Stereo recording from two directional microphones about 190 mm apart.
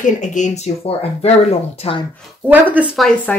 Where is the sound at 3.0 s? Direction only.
10° left (ahead or behind).